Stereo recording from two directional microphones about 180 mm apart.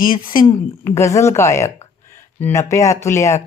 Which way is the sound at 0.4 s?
15° left (ahead or behind).